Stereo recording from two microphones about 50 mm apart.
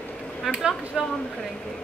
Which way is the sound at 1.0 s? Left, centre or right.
Centre.